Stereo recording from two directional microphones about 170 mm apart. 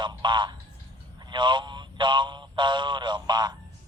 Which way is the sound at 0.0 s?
25° right (ahead or behind).